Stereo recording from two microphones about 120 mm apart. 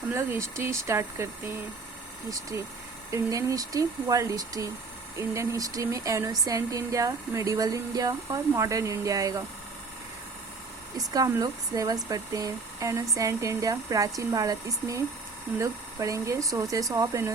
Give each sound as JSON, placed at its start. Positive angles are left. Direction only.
{"t": 0.1, "sound": "speech", "side_deg": -25}
{"t": 3.1, "sound": "speech", "side_deg": -25}
{"t": 10.9, "sound": "speech", "side_deg": -30}